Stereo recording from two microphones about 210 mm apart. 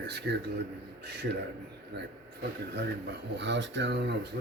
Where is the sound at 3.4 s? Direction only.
55° right (ahead or behind).